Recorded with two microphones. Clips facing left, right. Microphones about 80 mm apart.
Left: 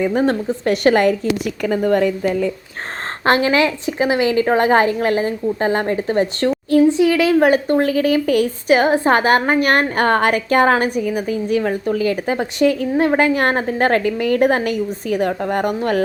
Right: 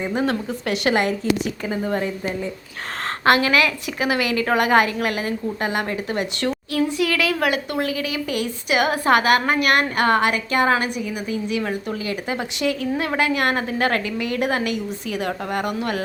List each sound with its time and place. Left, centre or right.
0.2 s speech: left
1.6 s a woman's voice: left
3.2 s a woman's voice: left